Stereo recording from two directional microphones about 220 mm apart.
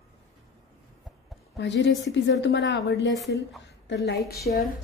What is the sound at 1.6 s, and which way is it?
A woman's voice, 55° left (ahead or behind).